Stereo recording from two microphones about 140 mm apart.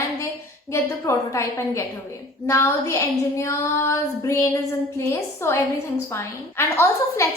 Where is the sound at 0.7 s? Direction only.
20° left (ahead or behind).